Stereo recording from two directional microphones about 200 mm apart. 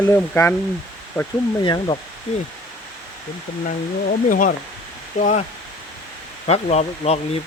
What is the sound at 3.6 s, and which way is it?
Speech, 40° left (ahead or behind).